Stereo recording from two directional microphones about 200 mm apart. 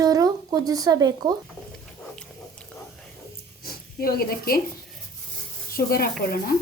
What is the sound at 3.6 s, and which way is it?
Speech, 50° left (ahead or behind).